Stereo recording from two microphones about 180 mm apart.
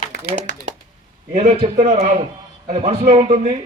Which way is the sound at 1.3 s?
40° right (ahead or behind).